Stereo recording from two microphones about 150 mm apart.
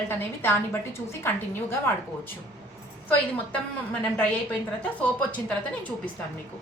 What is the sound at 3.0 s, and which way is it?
A woman's voice, 10° left (ahead or behind).